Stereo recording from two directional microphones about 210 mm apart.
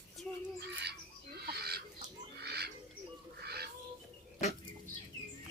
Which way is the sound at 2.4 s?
50° right (ahead or behind).